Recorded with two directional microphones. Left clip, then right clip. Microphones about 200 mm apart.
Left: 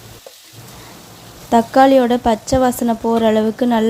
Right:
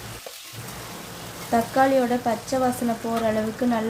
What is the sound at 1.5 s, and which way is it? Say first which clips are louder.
A woman's voice: left 9 dB; 40° left (ahead or behind).